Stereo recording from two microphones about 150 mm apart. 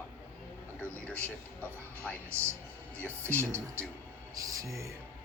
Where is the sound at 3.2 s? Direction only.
15° right (ahead or behind).